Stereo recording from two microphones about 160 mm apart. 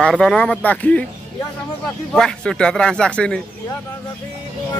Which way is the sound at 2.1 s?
5° left (ahead or behind).